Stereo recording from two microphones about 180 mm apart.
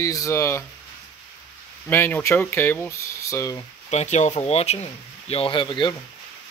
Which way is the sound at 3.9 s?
40° left (ahead or behind).